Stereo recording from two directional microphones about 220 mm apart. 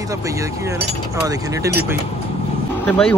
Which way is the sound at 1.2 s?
10° right (ahead or behind).